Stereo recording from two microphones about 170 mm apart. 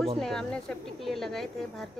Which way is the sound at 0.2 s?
5° left (ahead or behind).